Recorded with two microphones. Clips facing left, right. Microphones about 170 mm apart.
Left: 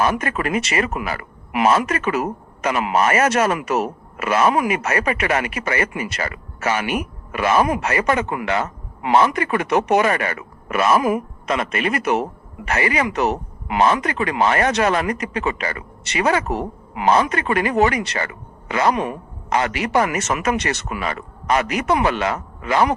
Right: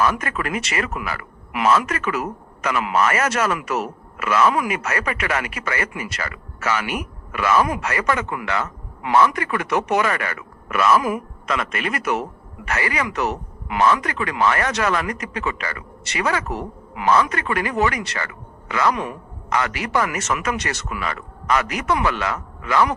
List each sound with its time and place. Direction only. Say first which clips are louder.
0.0 s speech: left 2 dB; 25° left (ahead or behind)